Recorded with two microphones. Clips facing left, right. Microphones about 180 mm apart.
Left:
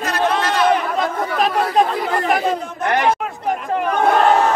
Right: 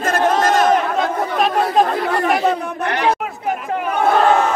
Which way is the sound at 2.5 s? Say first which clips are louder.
Right 2 dB; 65° right (ahead or behind).